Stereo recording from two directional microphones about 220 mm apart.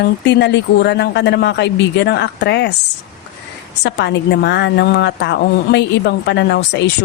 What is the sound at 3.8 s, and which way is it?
Speech, 50° left (ahead or behind).